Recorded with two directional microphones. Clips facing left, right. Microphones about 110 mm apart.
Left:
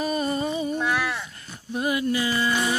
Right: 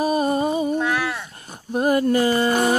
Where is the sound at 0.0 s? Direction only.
45° right (ahead or behind).